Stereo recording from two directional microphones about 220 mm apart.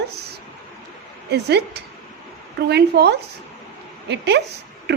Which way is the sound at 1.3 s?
50° right (ahead or behind).